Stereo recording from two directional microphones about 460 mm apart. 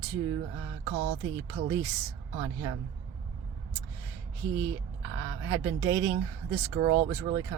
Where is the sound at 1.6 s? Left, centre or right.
Centre.